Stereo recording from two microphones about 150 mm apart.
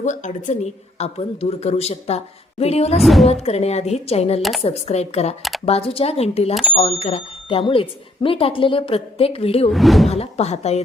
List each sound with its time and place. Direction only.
0.0 s a woman's voice: 55° left (ahead or behind)
3.0 s speech: centre (ahead or behind)
3.4 s a woman's voice: 45° left (ahead or behind)
6.5 s speech: centre (ahead or behind)
6.7 s speech: 45° left (ahead or behind)
9.6 s speech: centre (ahead or behind)
10.1 s a woman's voice: 45° left (ahead or behind)